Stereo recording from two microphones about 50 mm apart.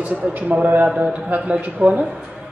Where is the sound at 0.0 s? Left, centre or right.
Right.